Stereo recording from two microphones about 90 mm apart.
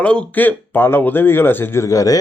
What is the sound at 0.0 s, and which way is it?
Speech, 15° left (ahead or behind).